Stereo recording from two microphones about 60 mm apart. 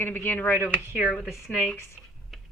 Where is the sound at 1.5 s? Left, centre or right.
Left.